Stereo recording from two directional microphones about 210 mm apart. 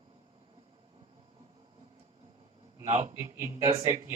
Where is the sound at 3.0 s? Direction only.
15° right (ahead or behind).